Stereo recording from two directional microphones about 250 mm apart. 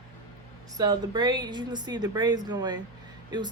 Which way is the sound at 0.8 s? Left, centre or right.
Centre.